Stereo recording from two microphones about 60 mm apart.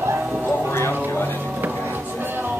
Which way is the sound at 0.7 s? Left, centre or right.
Left.